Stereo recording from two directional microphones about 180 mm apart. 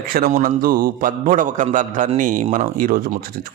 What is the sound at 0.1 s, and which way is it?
A man's voice, 50° right (ahead or behind).